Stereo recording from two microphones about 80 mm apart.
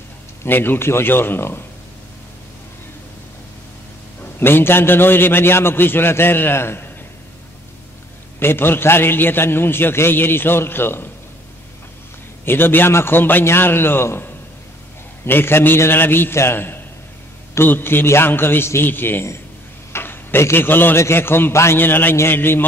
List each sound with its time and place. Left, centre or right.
0.4 s a man's voice: left
4.2 s a man's voice: left
8.4 s a man's voice: left
12.4 s a man's voice: left
19.9 s a sound: left
21.0 s a man's voice: left